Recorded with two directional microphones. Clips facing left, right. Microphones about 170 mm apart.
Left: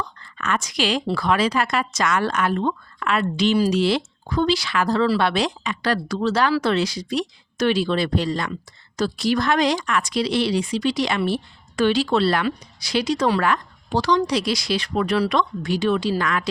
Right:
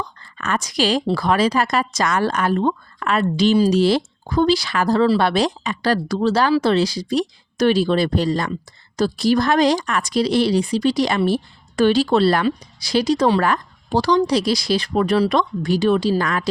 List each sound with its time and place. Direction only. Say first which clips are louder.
0.2 s a woman's voice: right 1 dB; 35° right (ahead or behind)